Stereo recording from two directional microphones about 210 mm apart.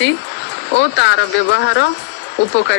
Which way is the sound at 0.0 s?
55° left (ahead or behind).